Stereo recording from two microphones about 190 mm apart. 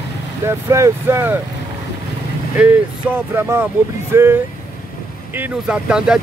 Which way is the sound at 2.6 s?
10° right (ahead or behind).